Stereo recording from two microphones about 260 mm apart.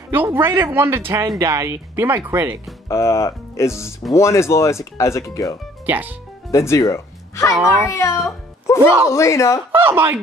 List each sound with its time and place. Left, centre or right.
0.1 s speech: centre
2.9 s speech: centre
5.9 s speech: centre
6.5 s speech: centre
7.5 s speech: centre
7.9 s speech: centre
9.8 s speech: centre